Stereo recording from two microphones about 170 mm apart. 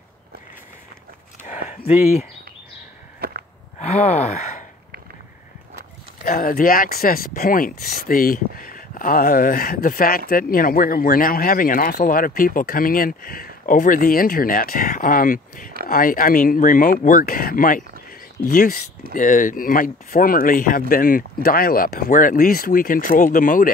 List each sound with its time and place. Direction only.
3.8 s speech: 40° left (ahead or behind)
6.2 s speech: 55° left (ahead or behind)